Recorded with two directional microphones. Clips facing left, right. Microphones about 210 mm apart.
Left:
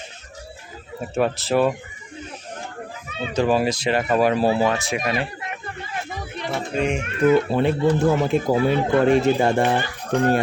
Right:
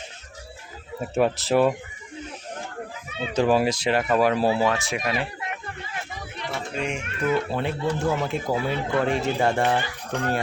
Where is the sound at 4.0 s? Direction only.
Centre (ahead or behind).